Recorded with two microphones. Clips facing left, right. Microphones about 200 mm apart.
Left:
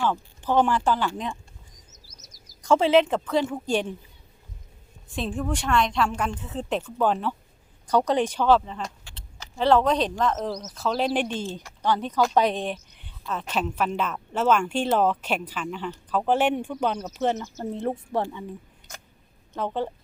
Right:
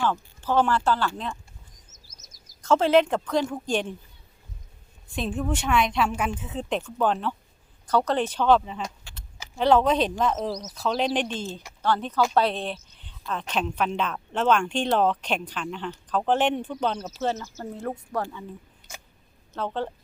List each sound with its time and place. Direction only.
0.0 s speech: 15° left (ahead or behind)
2.1 s a sound: 15° left (ahead or behind)
2.8 s a woman's voice: centre (ahead or behind)
5.1 s a woman's voice: centre (ahead or behind)
8.6 s a woman's voice: 5° right (ahead or behind)
10.7 s speech: centre (ahead or behind); by 18.4 s 20° left (ahead or behind)
19.5 s speech: 15° left (ahead or behind)